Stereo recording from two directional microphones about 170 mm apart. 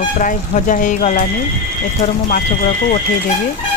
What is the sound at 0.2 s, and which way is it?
Speech, 50° left (ahead or behind).